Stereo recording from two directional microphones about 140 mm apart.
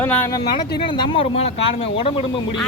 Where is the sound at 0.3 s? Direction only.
30° left (ahead or behind).